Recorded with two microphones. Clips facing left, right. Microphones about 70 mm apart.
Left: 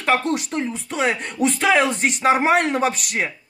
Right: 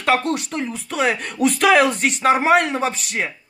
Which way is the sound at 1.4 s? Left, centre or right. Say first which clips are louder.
Right 2 dB; right.